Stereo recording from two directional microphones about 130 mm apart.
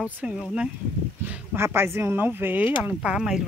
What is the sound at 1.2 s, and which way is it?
Speech, 15° right (ahead or behind).